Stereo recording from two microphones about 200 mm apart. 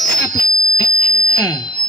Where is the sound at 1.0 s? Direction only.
20° left (ahead or behind).